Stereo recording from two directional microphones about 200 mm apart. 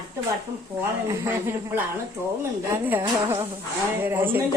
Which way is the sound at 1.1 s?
10° right (ahead or behind).